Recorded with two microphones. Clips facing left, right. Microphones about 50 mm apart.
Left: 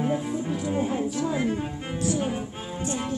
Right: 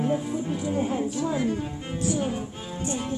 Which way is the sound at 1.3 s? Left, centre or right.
Left.